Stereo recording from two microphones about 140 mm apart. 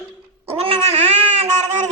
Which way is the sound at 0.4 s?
45° right (ahead or behind).